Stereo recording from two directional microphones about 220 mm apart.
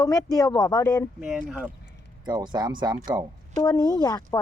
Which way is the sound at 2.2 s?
20° right (ahead or behind).